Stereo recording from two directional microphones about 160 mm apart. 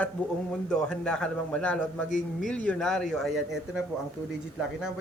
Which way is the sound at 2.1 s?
50° left (ahead or behind).